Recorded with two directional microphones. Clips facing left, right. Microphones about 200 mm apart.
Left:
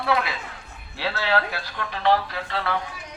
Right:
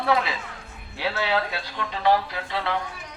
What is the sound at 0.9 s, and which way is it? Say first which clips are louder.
A man's voice: left 1 dB; 15° right (ahead or behind).